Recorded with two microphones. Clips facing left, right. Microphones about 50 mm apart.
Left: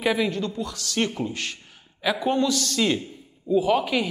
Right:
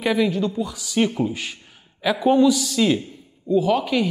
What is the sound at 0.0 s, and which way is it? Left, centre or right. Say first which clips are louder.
A man's voice: right 3 dB; centre.